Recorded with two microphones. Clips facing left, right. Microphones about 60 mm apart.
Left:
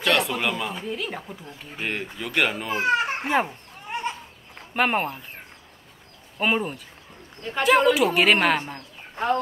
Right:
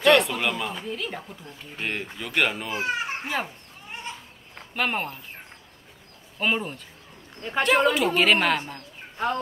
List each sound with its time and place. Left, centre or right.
0.0 s speech: centre
2.7 s a child's voice: left
3.3 s speech: left
3.9 s goat: left
4.7 s speech: centre
6.4 s speech: centre